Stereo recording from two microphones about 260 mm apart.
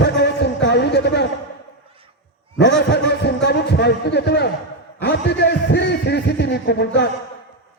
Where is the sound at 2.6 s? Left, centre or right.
Left.